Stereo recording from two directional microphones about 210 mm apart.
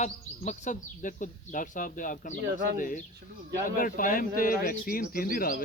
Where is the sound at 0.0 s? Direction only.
35° left (ahead or behind).